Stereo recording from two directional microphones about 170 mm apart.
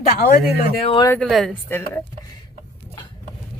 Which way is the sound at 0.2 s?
60° left (ahead or behind).